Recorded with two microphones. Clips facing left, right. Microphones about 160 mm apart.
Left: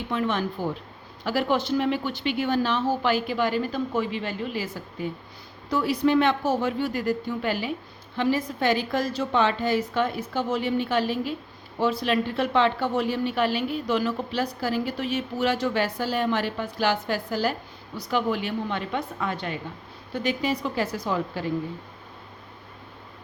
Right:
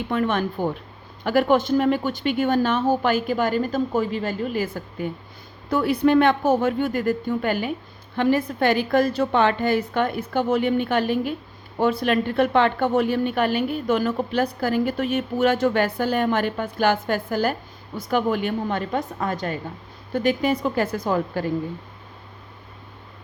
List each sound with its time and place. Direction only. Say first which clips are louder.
0.1 s a woman's voice: right 3 dB; 55° right (ahead or behind)